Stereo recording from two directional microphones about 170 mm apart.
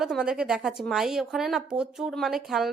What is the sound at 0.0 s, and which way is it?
A woman's voice, 5° right (ahead or behind).